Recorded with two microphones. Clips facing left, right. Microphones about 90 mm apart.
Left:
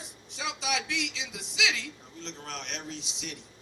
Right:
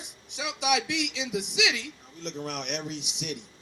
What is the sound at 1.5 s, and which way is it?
A man's voice, 20° right (ahead or behind).